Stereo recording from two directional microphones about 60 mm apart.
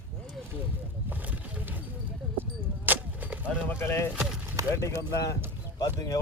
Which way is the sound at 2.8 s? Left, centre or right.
Right.